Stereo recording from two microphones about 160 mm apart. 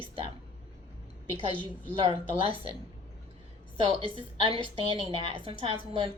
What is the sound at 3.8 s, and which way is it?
A woman's voice, 35° right (ahead or behind).